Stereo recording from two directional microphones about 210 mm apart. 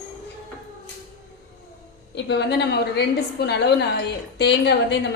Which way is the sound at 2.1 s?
55° left (ahead or behind).